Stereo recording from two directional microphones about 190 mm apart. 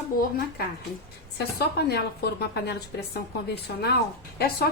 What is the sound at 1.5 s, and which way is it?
A woman's voice, 55° left (ahead or behind).